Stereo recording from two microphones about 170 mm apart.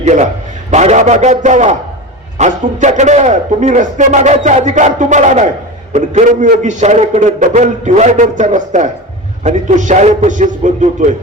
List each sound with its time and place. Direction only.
0.0 s a man's voice: 45° right (ahead or behind)